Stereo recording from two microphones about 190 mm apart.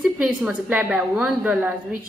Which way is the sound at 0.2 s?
5° right (ahead or behind).